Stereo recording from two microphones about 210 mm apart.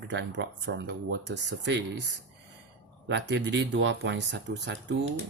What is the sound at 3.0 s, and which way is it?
Speech, 55° right (ahead or behind).